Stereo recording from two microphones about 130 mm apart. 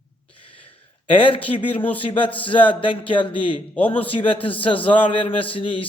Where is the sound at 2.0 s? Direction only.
40° left (ahead or behind).